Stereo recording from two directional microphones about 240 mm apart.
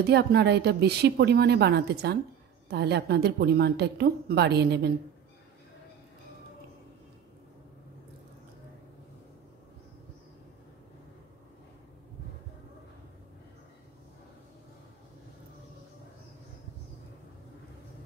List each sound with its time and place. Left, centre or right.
0.0 s a woman's voice: right